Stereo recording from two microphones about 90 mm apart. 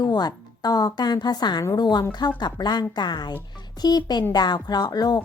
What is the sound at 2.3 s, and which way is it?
A woman's voice, 55° left (ahead or behind).